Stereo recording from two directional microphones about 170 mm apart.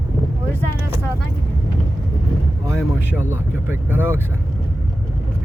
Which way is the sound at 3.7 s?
10° right (ahead or behind).